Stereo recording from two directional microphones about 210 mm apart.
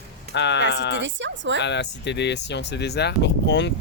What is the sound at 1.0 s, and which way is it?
Speech, 60° right (ahead or behind).